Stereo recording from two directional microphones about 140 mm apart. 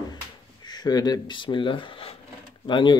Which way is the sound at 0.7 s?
30° left (ahead or behind).